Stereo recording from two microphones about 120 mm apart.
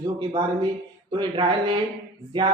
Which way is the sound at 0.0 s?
40° right (ahead or behind).